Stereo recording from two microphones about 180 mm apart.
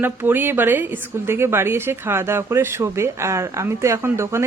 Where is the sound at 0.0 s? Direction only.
10° right (ahead or behind).